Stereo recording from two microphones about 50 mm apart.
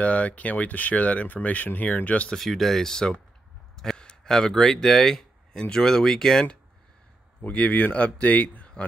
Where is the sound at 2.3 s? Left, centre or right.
Centre.